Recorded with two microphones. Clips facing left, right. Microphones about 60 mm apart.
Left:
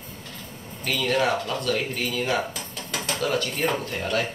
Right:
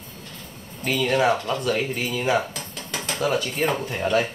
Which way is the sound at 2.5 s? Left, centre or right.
Centre.